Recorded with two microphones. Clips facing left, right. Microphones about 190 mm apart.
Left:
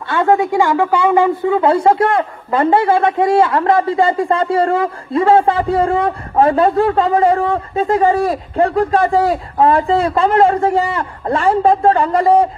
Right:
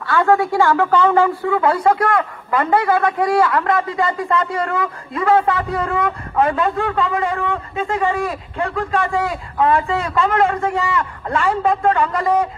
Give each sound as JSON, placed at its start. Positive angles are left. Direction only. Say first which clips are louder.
{"t": 0.0, "sound": "a woman's voice", "louder": "left 2 dB", "side_deg": 20}